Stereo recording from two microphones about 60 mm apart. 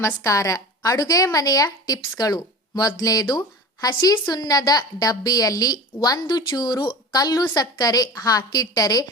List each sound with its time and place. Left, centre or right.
0.2 s a woman's voice: left